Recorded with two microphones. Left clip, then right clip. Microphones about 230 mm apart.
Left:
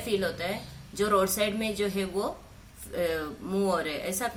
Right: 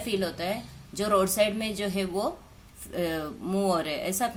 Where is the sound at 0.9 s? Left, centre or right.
Right.